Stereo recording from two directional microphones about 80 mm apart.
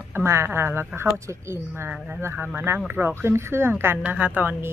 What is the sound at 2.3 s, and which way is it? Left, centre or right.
A woman's voice, centre.